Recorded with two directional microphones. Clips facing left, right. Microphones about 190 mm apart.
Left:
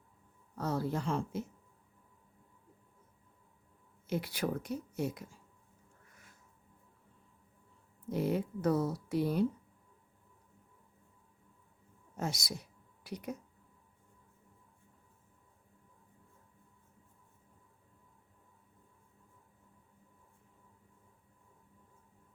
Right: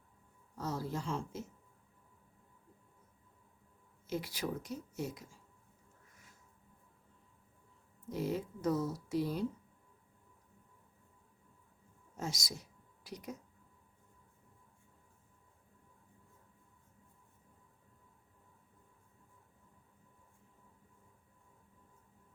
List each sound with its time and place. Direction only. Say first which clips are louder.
0.5 s speech: left 4 dB; 60° left (ahead or behind)
4.0 s speech: left 3 dB; 60° left (ahead or behind)
8.1 s speech: left 4 dB; 60° left (ahead or behind)
12.1 s speech: left 3 dB; 60° left (ahead or behind)